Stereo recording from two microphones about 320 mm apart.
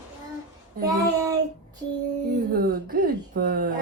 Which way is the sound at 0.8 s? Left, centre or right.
Centre.